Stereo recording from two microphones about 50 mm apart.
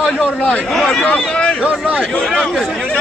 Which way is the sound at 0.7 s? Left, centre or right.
Centre.